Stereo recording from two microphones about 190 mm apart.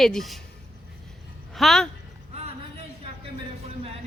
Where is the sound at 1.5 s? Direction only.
Centre (ahead or behind).